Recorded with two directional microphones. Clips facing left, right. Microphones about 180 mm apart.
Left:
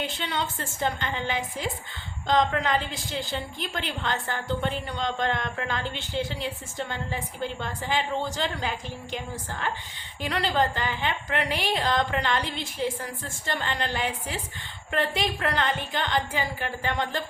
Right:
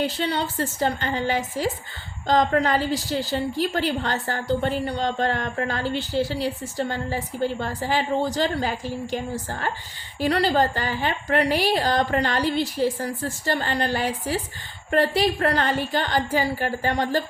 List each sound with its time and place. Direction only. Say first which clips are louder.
0.0 s a woman's voice: right 6 dB; 35° right (ahead or behind)